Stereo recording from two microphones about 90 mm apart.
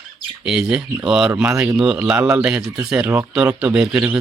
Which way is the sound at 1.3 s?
20° right (ahead or behind).